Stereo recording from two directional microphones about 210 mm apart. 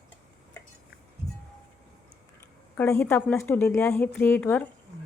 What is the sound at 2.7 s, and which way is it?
A woman's voice, 10° left (ahead or behind).